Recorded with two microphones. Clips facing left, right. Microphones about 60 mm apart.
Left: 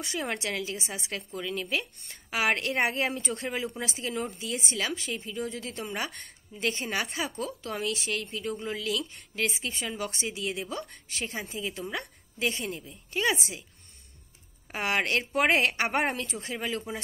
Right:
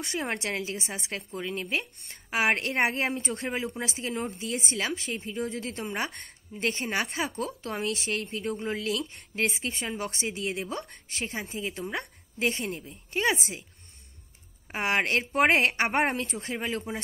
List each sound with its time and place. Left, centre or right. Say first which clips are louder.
0.0 s a woman's voice: right 1 dB; right
14.9 s a woman's voice: right 1 dB; right